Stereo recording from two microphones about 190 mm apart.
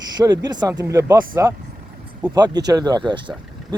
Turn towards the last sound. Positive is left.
turn(degrees=-25)  # may be behind; listen again after turning